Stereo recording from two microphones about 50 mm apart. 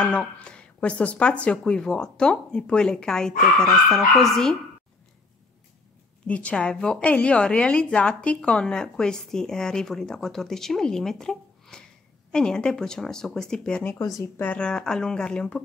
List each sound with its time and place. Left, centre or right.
0.0 s speech: left
1.7 s speech: centre
6.2 s a woman's voice: left
6.5 s a woman's voice: centre